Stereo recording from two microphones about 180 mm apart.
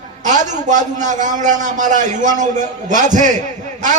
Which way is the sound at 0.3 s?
45° right (ahead or behind).